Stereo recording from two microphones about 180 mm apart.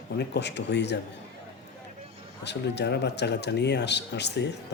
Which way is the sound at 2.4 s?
70° left (ahead or behind).